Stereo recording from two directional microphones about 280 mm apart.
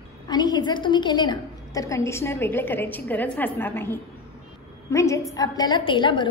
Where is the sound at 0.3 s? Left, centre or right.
Centre.